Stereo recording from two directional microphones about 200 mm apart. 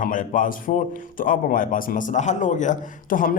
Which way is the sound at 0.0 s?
40° left (ahead or behind).